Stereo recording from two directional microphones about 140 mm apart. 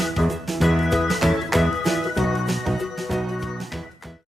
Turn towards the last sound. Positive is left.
turn(degrees=0)  # may be behind; listen again after turning